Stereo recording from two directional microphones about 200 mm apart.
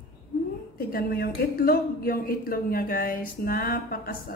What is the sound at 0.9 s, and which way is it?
Speech, 50° left (ahead or behind).